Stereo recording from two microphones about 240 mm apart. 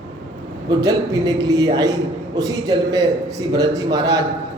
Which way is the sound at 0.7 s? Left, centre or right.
Centre.